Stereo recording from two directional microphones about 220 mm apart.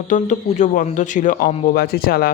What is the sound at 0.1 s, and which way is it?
A man's voice, 35° left (ahead or behind).